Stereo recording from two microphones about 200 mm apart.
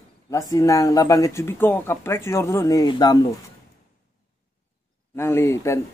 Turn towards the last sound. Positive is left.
turn(degrees=15)  # may be behind; listen again after turning